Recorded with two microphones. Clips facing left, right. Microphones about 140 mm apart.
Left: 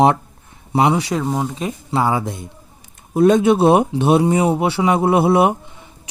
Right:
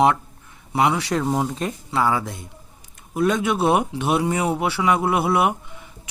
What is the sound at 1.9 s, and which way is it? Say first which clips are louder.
Speech: left 3 dB; 25° left (ahead or behind).